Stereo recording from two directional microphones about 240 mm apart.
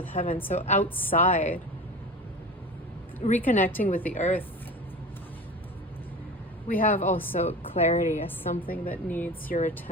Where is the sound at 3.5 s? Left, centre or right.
Left.